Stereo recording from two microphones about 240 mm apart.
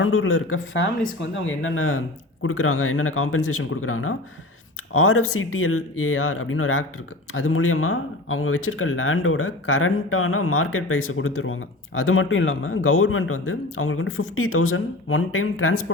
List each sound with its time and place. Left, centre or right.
0.0 s speech: left